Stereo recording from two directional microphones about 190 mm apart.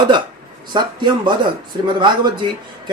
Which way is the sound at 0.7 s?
25° right (ahead or behind).